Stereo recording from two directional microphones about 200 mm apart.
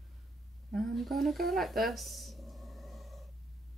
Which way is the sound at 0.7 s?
Centre (ahead or behind).